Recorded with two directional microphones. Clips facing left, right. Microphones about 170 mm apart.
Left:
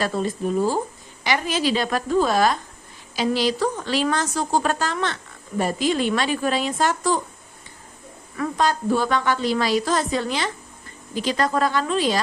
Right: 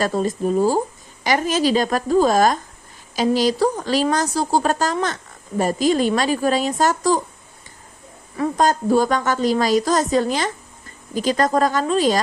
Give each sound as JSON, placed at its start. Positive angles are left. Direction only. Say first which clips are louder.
{"t": 0.0, "sound": "a woman's voice", "louder": "right 3 dB", "side_deg": -40}
{"t": 8.5, "sound": "a woman's voice", "louder": "right 4 dB", "side_deg": -45}